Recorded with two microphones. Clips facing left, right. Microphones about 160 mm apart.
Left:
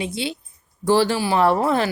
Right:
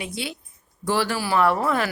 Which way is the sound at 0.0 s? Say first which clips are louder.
Left 5 dB; 25° left (ahead or behind).